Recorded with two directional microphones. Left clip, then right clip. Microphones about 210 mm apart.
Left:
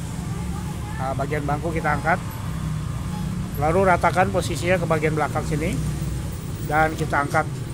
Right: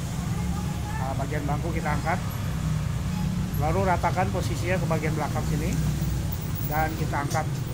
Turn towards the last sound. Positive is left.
turn(degrees=50)  # may be behind; listen again after turning